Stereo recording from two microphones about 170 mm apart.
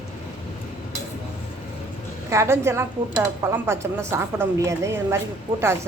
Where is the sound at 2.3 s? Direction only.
15° right (ahead or behind).